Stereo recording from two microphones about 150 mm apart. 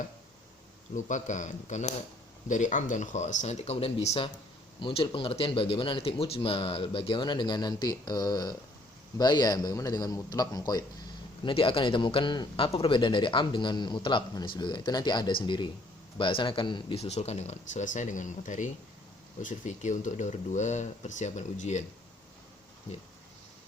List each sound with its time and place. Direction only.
0.9 s a man's voice: 55° left (ahead or behind)